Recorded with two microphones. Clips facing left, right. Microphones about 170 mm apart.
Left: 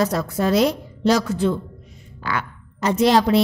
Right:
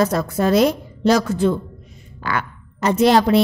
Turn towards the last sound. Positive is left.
turn(degrees=-55)  # may be behind; listen again after turning